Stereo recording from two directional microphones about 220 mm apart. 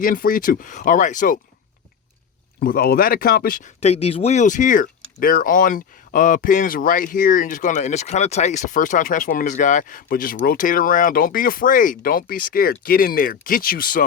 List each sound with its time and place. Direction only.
0.0 s speech: 40° left (ahead or behind)
2.6 s speech: 45° left (ahead or behind)